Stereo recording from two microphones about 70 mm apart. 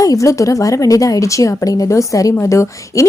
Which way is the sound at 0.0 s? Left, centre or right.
Left.